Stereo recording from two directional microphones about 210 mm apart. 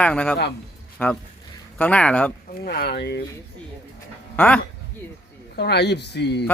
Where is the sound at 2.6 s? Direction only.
45° left (ahead or behind).